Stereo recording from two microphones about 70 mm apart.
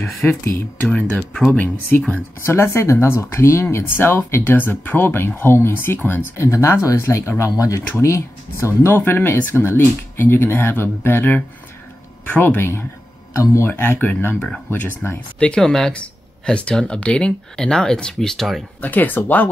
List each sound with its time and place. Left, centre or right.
0.0 s speech: left
0.9 s speech: centre
2.4 s speech: left
13.3 s speech: left
13.7 s speech: left; by 15.9 s centre
15.9 s speech: centre
18.8 s speech: left